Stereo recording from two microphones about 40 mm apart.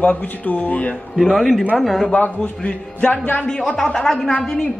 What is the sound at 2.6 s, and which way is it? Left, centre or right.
A man's voice, left.